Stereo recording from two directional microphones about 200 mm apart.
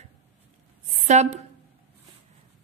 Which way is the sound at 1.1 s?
35° right (ahead or behind).